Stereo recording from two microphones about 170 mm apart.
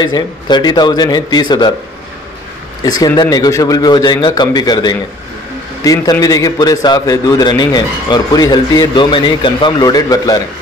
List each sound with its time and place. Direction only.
0.0 s a man's voice: 25° left (ahead or behind)
2.8 s a man's voice: 20° left (ahead or behind)